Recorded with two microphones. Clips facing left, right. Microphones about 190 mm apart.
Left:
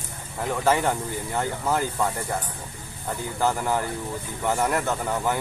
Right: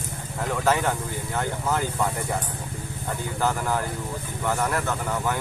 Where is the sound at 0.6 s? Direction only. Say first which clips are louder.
Left 1 dB; 10° left (ahead or behind).